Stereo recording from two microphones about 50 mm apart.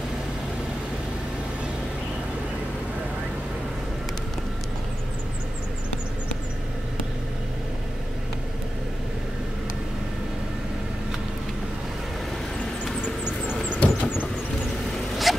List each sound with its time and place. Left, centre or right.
13.8 s vehicle: left
15.3 s zipper: centre